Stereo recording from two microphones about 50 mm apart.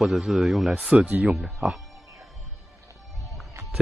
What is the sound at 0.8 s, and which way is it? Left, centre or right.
Speech, centre.